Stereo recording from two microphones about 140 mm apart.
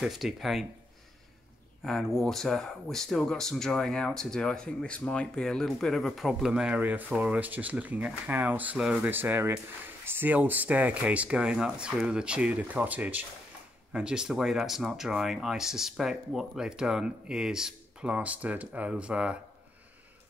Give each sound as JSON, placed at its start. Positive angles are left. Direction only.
{"t": 0.0, "sound": "speech", "side_deg": 0}
{"t": 1.9, "sound": "speech", "side_deg": 0}